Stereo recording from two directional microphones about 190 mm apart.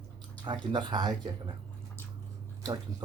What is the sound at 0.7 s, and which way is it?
Speech, 25° right (ahead or behind).